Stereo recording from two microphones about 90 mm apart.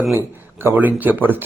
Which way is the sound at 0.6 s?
20° right (ahead or behind).